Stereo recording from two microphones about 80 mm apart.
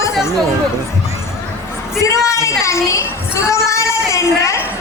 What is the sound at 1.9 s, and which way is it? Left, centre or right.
A woman's voice, left.